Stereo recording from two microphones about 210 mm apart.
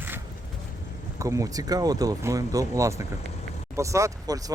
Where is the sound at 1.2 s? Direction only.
15° right (ahead or behind).